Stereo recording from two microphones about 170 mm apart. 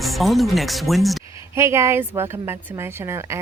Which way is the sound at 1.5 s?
15° right (ahead or behind).